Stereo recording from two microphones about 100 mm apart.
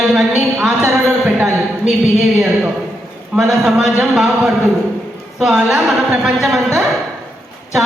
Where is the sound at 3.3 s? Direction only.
5° right (ahead or behind).